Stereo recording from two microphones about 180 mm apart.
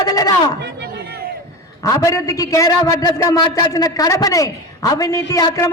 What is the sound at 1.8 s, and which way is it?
A man's voice, 20° left (ahead or behind).